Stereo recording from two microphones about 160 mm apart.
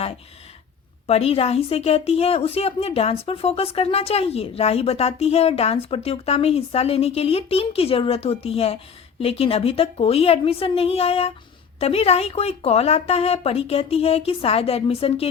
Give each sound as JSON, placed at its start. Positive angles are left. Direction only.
{"t": 1.0, "sound": "a woman's voice", "side_deg": 40}